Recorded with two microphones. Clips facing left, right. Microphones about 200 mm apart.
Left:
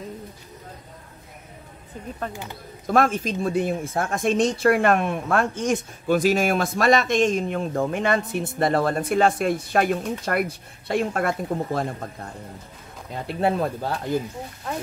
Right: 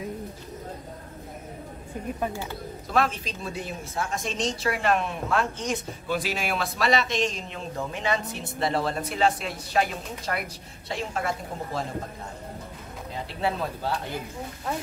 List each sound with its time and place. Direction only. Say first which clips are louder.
2.9 s a woman's voice: left 6 dB; 50° left (ahead or behind)
13.3 s a woman's voice: left 6 dB; 50° left (ahead or behind)